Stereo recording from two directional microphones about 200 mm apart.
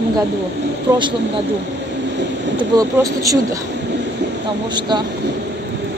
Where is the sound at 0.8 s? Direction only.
25° right (ahead or behind).